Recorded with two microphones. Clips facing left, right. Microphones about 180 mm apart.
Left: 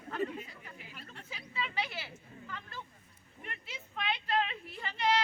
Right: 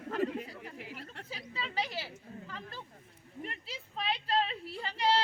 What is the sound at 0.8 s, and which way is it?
Chatter, 80° right.